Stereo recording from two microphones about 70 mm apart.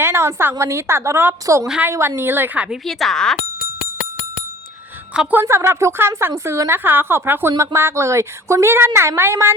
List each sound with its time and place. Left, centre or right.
0.0 s a woman's voice: right
2.8 s speech: centre
5.3 s a woman's voice: right